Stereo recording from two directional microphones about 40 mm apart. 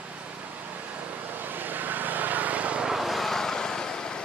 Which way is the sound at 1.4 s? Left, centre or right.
Right.